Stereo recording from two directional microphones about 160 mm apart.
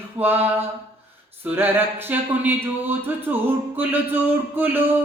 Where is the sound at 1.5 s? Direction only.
10° right (ahead or behind).